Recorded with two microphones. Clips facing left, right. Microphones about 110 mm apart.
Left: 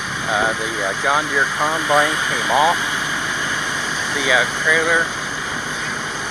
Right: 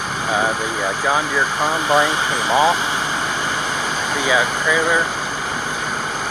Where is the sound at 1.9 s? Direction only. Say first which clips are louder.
Right 1 dB; 20° right (ahead or behind).